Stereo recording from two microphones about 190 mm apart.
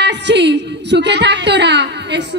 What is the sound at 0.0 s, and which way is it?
A woman's voice, 65° right (ahead or behind).